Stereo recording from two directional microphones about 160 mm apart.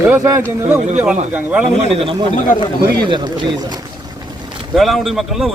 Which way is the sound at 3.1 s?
30° right (ahead or behind).